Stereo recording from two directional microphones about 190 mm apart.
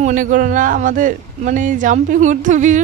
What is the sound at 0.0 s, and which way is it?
A man's voice, 45° right (ahead or behind).